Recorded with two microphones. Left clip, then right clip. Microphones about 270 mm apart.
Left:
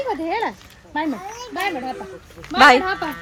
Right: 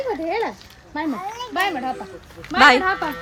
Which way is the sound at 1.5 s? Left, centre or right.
Centre.